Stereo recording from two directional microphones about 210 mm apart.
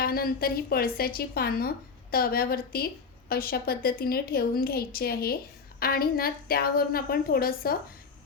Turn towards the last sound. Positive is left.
turn(degrees=45)  # may be behind; listen again after turning